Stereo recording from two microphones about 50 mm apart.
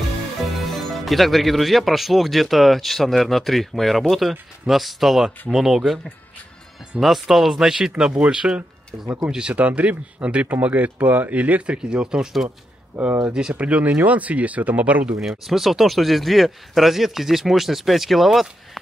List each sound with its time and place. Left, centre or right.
0.4 s speech: centre
7.0 s speech: centre
8.0 s speech: right
9.5 s speech: right; by 12.4 s centre
12.9 s speech: right
13.3 s speech: centre
15.1 s speech: centre